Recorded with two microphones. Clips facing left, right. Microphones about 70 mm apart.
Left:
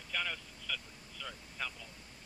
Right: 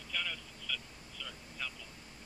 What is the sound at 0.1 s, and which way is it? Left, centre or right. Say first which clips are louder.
Vehicle: left 2 dB; left.